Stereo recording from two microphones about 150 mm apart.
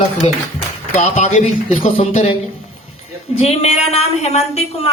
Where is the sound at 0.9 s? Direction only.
50° left (ahead or behind).